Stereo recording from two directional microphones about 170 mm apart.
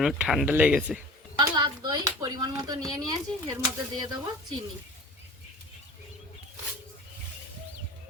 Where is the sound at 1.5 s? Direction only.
25° right (ahead or behind).